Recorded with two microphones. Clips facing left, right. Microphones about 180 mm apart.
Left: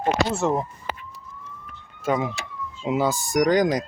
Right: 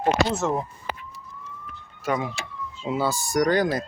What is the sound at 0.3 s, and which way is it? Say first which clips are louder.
Speech: left 2 dB; 15° left (ahead or behind).